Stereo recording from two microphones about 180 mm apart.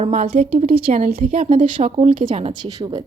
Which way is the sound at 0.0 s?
35° right (ahead or behind).